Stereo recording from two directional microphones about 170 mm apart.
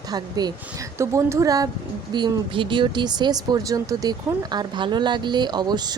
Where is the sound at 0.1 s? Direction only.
25° right (ahead or behind).